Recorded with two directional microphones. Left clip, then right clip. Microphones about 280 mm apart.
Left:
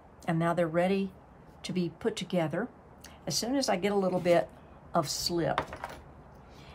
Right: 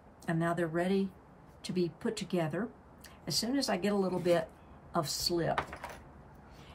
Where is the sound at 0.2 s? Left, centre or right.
Left.